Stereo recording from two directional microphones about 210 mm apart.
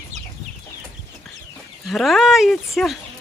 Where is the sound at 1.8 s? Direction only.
Centre (ahead or behind).